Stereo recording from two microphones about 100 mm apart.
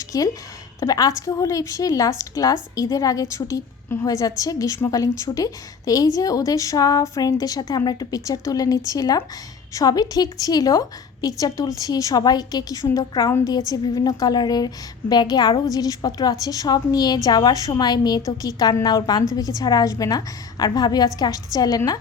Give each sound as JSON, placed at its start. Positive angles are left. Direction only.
{"t": 0.1, "sound": "a woman's voice", "side_deg": 40}